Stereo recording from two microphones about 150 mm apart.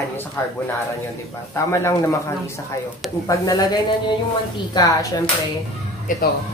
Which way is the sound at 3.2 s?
25° left (ahead or behind).